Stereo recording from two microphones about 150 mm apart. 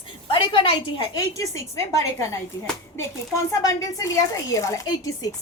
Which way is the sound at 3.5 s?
25° left (ahead or behind).